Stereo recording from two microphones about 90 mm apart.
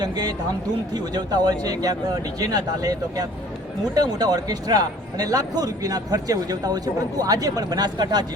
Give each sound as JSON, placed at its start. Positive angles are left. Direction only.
{"t": 0.0, "sound": "a man's voice", "side_deg": -50}